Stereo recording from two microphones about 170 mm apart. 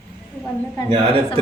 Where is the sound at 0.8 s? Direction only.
30° right (ahead or behind).